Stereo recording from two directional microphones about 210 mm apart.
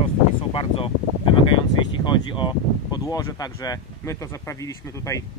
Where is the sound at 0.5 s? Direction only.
25° left (ahead or behind).